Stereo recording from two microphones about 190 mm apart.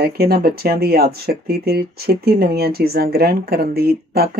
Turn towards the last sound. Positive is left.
turn(degrees=-55)  # may be behind; listen again after turning